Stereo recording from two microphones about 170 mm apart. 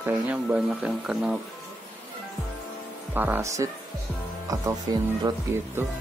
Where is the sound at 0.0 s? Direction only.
10° right (ahead or behind).